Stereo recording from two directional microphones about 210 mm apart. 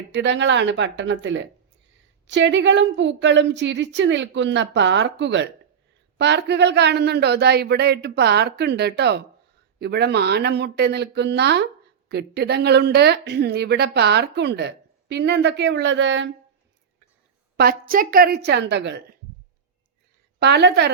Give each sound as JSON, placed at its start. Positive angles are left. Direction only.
{"t": 0.1, "sound": "a woman's voice", "side_deg": -55}
{"t": 17.6, "sound": "speech", "side_deg": -45}
{"t": 20.4, "sound": "speech", "side_deg": -50}